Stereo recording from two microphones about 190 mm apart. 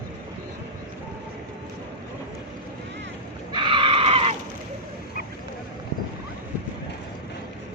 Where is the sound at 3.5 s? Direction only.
25° right (ahead or behind).